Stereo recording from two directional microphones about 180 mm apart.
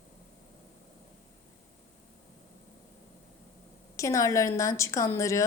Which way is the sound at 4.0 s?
15° left (ahead or behind).